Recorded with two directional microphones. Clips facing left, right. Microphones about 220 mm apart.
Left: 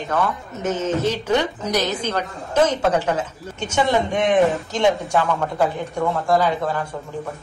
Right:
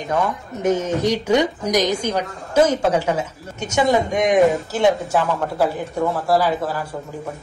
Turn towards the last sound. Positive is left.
turn(degrees=-5)  # may be behind; listen again after turning